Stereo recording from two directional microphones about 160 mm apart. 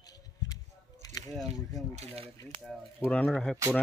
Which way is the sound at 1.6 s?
20° left (ahead or behind).